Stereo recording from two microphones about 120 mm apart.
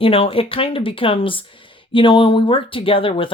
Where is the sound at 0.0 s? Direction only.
50° left (ahead or behind).